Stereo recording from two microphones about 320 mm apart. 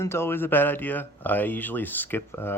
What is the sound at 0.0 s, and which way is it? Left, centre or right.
Speech, centre.